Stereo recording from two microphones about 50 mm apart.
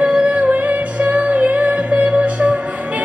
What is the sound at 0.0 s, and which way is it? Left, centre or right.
Music, right.